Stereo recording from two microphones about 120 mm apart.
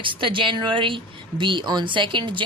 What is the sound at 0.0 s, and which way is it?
A woman's voice, 45° right (ahead or behind).